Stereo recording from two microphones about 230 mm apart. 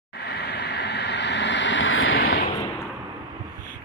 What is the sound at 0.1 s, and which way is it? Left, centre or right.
Vehicle, left.